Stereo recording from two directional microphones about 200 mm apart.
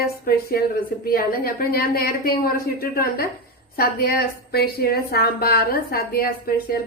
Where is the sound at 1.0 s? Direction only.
45° left (ahead or behind).